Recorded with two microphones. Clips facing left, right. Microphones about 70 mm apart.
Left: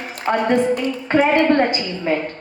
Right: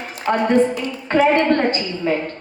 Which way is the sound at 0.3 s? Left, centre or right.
Centre.